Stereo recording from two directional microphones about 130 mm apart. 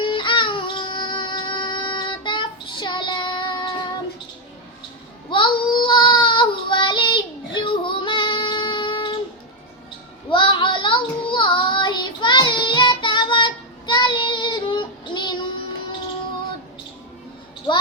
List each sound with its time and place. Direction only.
0.0 s music: 40° left (ahead or behind)
5.3 s child singing: 35° left (ahead or behind)
10.2 s child singing: 40° left (ahead or behind)